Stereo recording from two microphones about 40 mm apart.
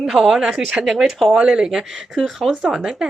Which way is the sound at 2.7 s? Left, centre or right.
Centre.